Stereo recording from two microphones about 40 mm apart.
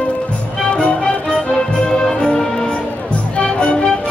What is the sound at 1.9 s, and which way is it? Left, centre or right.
Music, centre.